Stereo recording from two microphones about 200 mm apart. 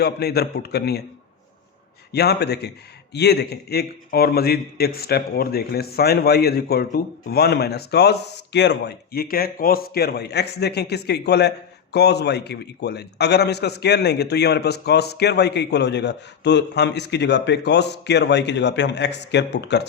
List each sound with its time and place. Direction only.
0.0 s a man's voice: 55° left (ahead or behind)
2.1 s a man's voice: 55° left (ahead or behind)